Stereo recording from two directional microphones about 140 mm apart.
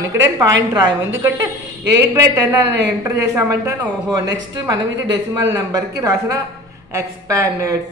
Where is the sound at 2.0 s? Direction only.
25° right (ahead or behind).